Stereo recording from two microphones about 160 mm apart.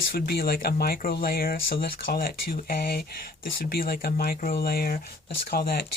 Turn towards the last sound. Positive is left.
turn(degrees=75)  # may be behind; listen again after turning